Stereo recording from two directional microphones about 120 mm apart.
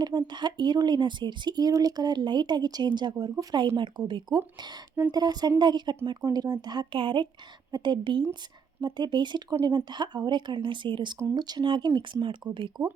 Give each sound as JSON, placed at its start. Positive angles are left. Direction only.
{"t": 0.0, "sound": "speech", "side_deg": -35}